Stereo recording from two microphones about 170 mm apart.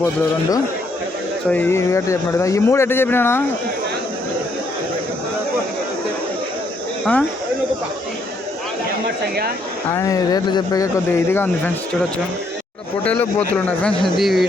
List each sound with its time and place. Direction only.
1.5 s speech: 10° left (ahead or behind)
7.0 s speech: 5° left (ahead or behind)
9.9 s speech: 20° left (ahead or behind)
13.5 s speech: 5° left (ahead or behind)